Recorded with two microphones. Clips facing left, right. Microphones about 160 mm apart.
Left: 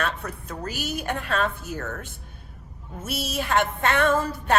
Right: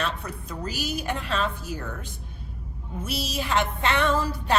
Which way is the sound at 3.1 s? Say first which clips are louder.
Left 2 dB; 55° left (ahead or behind).